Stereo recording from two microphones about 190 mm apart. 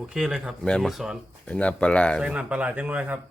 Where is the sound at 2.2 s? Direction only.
5° right (ahead or behind).